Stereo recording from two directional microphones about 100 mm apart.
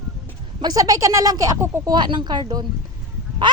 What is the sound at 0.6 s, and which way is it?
A woman's voice, 40° right (ahead or behind).